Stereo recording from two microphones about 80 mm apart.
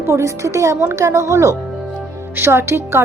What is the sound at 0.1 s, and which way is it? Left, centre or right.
A woman's voice, right.